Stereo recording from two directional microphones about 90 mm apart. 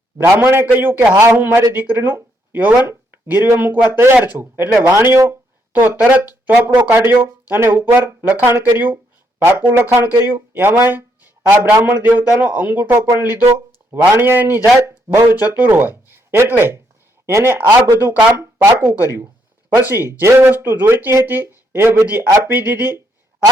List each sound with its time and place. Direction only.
0.3 s speech: 25° right (ahead or behind)